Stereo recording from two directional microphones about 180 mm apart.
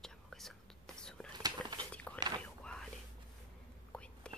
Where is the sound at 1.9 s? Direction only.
5° left (ahead or behind).